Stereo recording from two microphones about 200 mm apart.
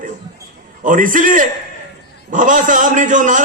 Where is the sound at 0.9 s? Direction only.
40° right (ahead or behind).